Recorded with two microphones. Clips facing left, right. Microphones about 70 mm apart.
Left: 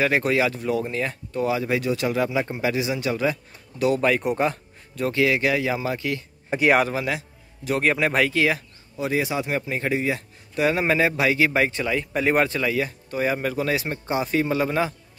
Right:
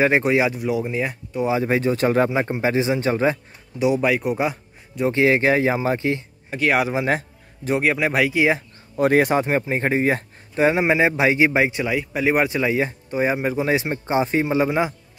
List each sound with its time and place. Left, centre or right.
0.0 s speech: right
1.5 s speech: right
3.7 s speech: centre
5.0 s a man's voice: right
6.5 s speech: left
7.1 s a sound: right
7.8 s speech: centre
8.4 s a man's voice: right
8.9 s a man's voice: right
9.5 s a man's voice: right; by 15.0 s centre